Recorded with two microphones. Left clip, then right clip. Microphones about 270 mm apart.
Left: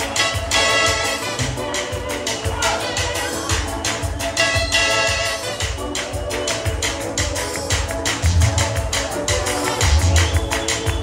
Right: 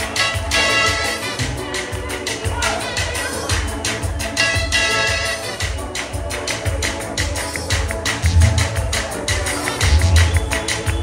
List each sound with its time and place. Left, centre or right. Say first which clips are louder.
0.2 s music: right 1 dB; left
4.4 s music: even; left
9.8 s music: even; left